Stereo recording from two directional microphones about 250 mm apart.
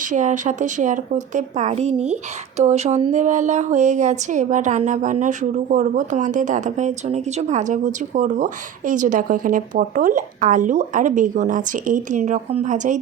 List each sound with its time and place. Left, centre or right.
0.0 s speech: right